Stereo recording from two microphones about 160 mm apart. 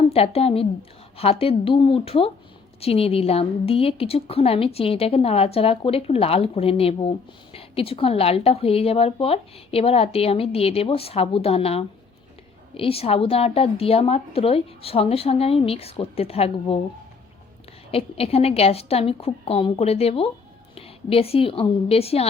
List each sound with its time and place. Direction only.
0.1 s a woman's voice: 40° left (ahead or behind)
17.9 s a woman's voice: 40° left (ahead or behind)